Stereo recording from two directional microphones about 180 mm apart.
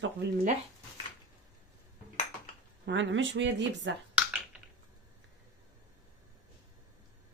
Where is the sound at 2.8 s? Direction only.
90° right.